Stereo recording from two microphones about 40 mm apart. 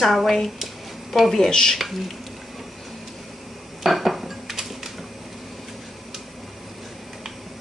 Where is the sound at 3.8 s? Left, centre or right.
Centre.